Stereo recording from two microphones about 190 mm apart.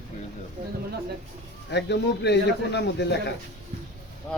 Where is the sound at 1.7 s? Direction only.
65° left (ahead or behind).